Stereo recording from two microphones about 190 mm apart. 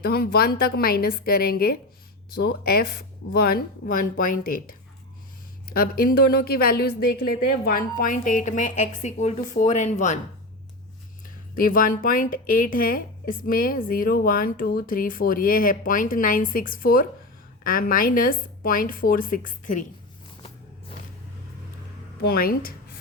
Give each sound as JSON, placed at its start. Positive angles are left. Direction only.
{"t": 0.0, "sound": "a woman's voice", "side_deg": 55}
{"t": 11.5, "sound": "a woman's voice", "side_deg": 50}
{"t": 22.2, "sound": "a woman's voice", "side_deg": 50}